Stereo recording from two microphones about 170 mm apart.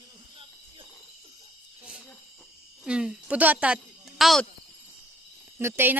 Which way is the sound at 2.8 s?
5° right (ahead or behind).